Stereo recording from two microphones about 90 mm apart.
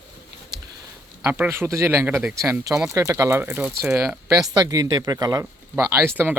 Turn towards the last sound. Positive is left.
turn(degrees=-25)  # may be behind; listen again after turning